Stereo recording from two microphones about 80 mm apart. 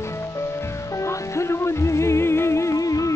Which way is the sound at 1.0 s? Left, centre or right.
Left.